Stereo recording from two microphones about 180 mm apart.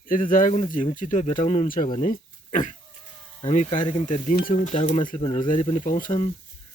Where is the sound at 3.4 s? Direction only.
35° left (ahead or behind).